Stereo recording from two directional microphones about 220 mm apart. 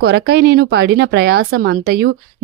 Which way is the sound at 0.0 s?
50° right (ahead or behind).